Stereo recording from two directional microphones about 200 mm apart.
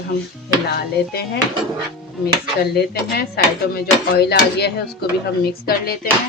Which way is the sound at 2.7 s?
50° left (ahead or behind).